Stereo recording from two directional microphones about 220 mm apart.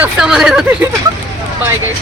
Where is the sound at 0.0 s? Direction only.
5° right (ahead or behind).